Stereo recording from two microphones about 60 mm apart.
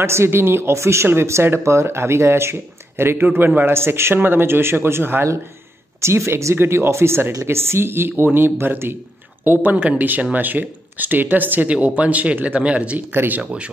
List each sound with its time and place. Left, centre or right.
0.0 s a man's voice: right
5.9 s a man's voice: right
13.1 s a man's voice: right
13.4 s speech: centre